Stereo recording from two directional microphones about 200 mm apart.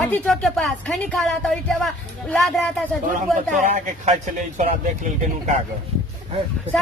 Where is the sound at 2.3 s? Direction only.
Centre (ahead or behind).